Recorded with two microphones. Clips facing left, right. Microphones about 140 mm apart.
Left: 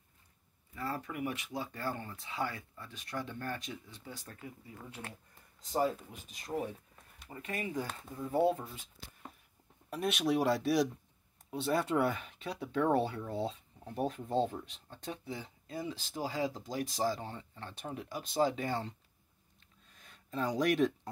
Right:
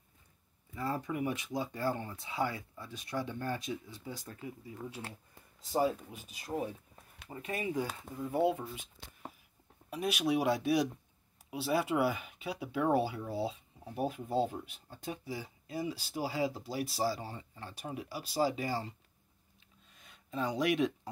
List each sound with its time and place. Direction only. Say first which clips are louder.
0.7 s speech: right 3 dB; 15° right (ahead or behind)
7.2 s speech: right 2 dB; 15° right (ahead or behind)
9.8 s speech: even; centre (ahead or behind)
19.9 s a sound: even; centre (ahead or behind)